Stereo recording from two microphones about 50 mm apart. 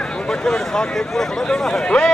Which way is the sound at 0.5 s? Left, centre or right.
Centre.